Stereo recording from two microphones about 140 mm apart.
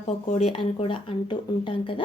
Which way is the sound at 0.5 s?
40° left (ahead or behind).